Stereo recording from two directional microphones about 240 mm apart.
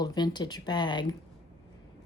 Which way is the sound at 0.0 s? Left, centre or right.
Centre.